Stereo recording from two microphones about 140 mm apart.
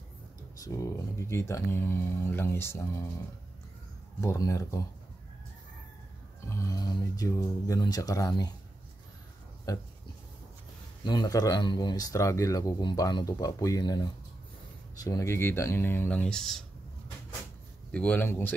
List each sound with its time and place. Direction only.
0.6 s speech: 20° left (ahead or behind)
4.2 s speech: 20° left (ahead or behind)
6.5 s speech: 25° left (ahead or behind)
9.7 s speech: 25° left (ahead or behind)
11.1 s speech: 30° left (ahead or behind); by 16.6 s 5° left (ahead or behind)
17.9 s speech: 10° left (ahead or behind)